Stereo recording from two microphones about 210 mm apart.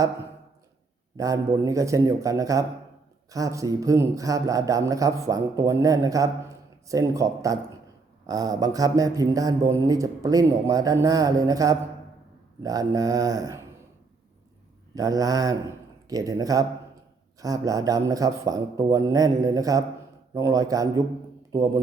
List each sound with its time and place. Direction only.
1.1 s speech: 15° right (ahead or behind)
14.9 s speech: 15° right (ahead or behind)